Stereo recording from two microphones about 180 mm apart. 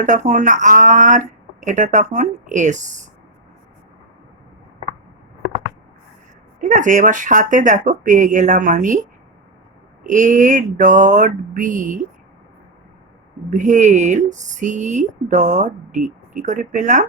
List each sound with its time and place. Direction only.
0.0 s speech: 45° right (ahead or behind)
6.6 s speech: 45° right (ahead or behind)
10.1 s speech: 45° right (ahead or behind)
13.5 s speech: 45° right (ahead or behind)